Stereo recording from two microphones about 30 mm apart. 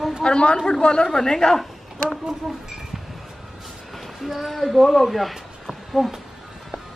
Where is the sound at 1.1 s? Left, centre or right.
Centre.